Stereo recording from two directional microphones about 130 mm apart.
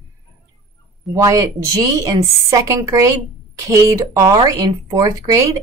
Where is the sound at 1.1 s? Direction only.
25° right (ahead or behind).